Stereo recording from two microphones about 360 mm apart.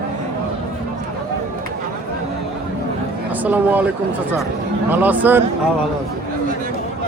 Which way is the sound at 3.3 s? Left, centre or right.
Centre.